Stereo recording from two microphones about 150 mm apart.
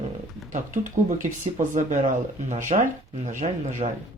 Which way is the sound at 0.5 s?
60° right (ahead or behind).